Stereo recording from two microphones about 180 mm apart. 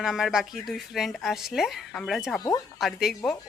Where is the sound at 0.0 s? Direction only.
Centre (ahead or behind).